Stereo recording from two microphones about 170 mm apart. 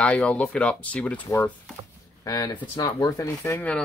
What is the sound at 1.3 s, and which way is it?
Speech, 20° left (ahead or behind).